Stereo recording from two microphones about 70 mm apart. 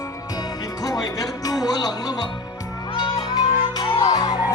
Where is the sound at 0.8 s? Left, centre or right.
Left.